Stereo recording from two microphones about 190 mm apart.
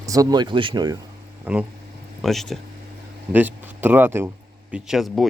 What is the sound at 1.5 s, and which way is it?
Speech, 10° right (ahead or behind).